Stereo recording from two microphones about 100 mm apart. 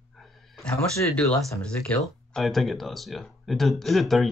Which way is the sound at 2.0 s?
Centre (ahead or behind).